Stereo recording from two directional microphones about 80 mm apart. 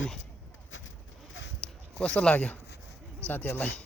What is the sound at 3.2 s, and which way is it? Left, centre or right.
Speech, left.